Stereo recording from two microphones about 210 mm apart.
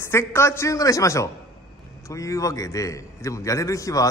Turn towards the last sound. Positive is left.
turn(degrees=15)  # may be behind; listen again after turning